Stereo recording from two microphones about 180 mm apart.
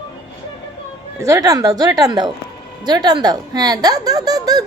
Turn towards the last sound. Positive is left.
turn(degrees=-20)  # may be behind; listen again after turning